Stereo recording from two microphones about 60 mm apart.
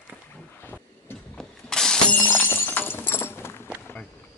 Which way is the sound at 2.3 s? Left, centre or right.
Left.